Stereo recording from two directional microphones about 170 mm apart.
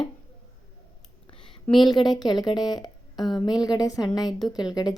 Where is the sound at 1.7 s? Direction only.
25° left (ahead or behind).